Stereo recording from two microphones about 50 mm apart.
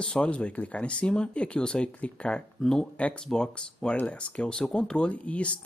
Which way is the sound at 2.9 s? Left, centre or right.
Left.